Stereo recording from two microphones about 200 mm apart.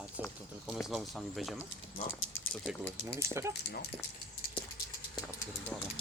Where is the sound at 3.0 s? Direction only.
15° right (ahead or behind).